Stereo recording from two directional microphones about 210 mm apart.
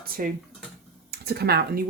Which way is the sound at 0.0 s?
45° right (ahead or behind).